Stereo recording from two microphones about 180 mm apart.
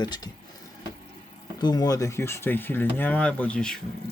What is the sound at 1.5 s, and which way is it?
Speech, 20° left (ahead or behind).